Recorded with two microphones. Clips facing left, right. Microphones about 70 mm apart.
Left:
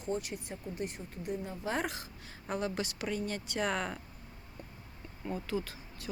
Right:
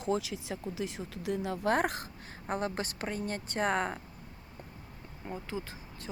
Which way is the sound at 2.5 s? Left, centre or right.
Right.